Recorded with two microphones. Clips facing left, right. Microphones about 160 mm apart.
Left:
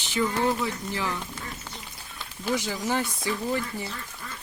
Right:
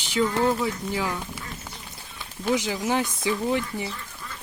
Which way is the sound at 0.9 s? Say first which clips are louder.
Right 3 dB; 10° right (ahead or behind).